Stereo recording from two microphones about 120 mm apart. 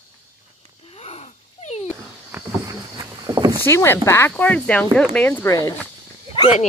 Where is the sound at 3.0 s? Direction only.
30° right (ahead or behind).